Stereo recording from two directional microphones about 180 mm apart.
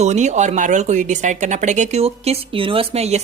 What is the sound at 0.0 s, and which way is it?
Speech, 40° right (ahead or behind).